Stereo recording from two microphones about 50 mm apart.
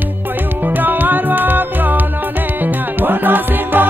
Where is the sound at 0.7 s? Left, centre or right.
Right.